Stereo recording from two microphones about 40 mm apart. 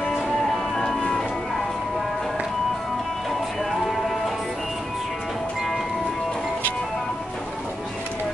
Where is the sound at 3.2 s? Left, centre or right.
Centre.